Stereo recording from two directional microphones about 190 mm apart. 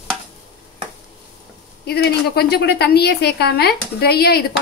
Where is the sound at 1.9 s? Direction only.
55° left (ahead or behind).